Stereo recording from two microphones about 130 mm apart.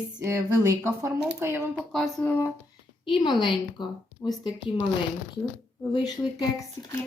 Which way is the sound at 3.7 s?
35° left (ahead or behind).